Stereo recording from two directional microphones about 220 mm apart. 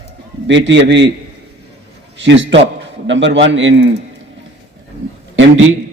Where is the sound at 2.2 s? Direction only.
55° right (ahead or behind).